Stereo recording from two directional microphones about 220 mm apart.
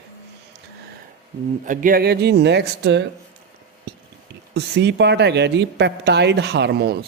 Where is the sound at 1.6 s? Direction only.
35° right (ahead or behind).